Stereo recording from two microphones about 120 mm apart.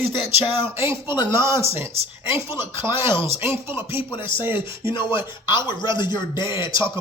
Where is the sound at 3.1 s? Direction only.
20° right (ahead or behind).